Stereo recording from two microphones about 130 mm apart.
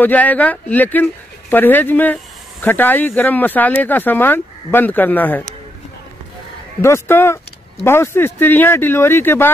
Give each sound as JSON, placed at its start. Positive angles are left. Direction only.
{"t": 0.0, "sound": "speech", "side_deg": 10}
{"t": 6.8, "sound": "speech", "side_deg": 20}